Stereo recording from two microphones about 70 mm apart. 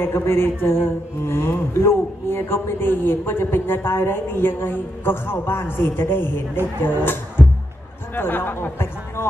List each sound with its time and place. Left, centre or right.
0.0 s speech: left